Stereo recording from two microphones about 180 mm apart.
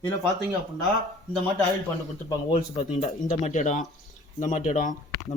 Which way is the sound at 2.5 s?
40° left (ahead or behind).